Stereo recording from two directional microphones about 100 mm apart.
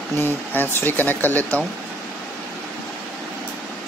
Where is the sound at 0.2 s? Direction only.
20° left (ahead or behind).